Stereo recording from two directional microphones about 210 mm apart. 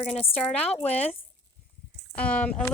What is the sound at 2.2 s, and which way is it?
Speech, 5° left (ahead or behind).